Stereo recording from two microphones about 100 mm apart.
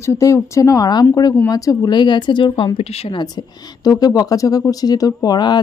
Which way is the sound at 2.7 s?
80° left.